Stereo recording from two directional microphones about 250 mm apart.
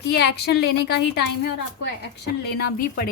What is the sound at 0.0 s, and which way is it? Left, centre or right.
A woman's voice, left.